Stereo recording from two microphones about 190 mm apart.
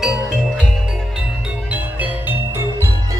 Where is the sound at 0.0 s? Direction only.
Centre (ahead or behind).